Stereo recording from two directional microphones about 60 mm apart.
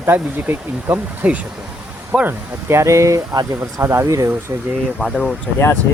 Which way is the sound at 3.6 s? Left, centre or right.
Right.